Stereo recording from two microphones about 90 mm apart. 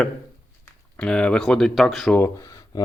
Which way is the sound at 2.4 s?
40° left (ahead or behind).